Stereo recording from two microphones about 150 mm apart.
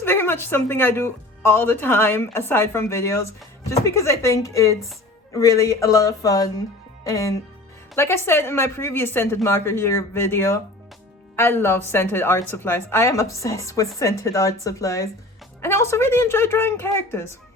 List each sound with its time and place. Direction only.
0.0 s a woman's voice: 15° left (ahead or behind)